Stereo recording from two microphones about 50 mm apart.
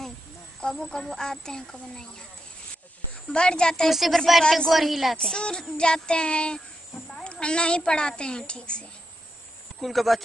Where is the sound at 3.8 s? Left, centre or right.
Centre.